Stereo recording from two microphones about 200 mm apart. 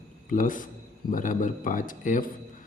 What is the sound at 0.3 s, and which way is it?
Speech, 40° left (ahead or behind).